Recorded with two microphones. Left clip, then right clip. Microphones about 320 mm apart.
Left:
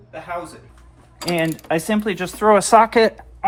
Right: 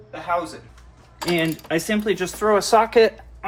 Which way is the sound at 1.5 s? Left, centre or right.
Centre.